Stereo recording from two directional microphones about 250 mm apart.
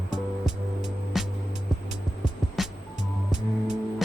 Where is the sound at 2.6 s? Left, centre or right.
Centre.